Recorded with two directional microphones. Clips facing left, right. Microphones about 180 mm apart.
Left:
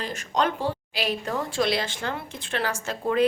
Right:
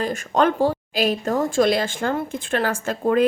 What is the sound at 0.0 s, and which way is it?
A woman's voice, 50° right (ahead or behind).